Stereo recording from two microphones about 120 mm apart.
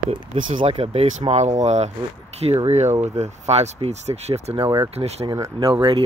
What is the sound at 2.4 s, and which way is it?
Speech, 60° right (ahead or behind).